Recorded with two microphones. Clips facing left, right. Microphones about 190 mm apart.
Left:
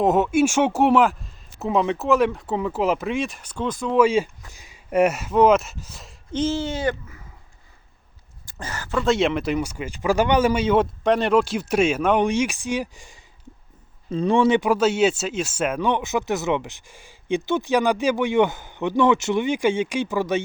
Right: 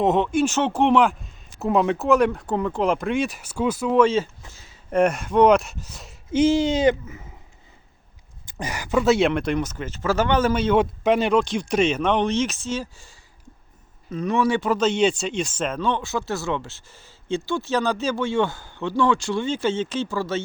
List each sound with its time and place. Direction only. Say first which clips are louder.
0.0 s speech: left 1 dB; 5° left (ahead or behind)
3.9 s speech: left 1 dB; 10° left (ahead or behind)
6.4 s speech: right 6 dB; 15° right (ahead or behind)
8.4 s speech: right 4 dB; 15° right (ahead or behind)
9.1 s speech: right 1 dB; centre (ahead or behind)
11.0 s speech: even; centre (ahead or behind); by 13.1 s 15° left (ahead or behind)
14.1 s speech: left 4 dB; 30° left (ahead or behind)